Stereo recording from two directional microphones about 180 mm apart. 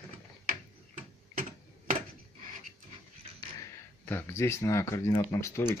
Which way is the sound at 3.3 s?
15° left (ahead or behind).